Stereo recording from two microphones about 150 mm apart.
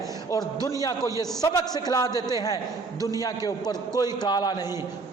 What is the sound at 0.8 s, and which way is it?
A man's voice, 25° left (ahead or behind).